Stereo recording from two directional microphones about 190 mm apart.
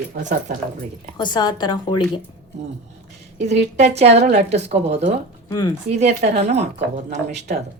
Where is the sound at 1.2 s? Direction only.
25° left (ahead or behind).